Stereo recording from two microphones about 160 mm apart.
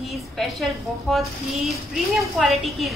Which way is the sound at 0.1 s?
Centre (ahead or behind).